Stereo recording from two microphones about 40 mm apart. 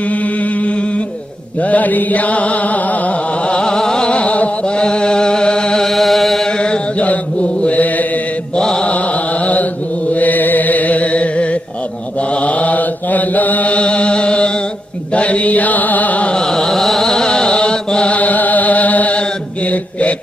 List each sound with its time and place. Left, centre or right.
0.1 s mantra: left
3.4 s music: left
4.1 s a sound: left
5.9 s music: centre
6.4 s chant: left
7.6 s mantra: left
8.5 s mantra: centre
8.9 s music: left
10.1 s mantra: left
12.4 s chant: left
15.1 s mantra: left
16.3 s chant: centre
18.2 s music: left
19.1 s mantra: left